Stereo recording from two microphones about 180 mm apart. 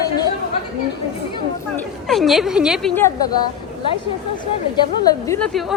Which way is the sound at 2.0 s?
Centre (ahead or behind).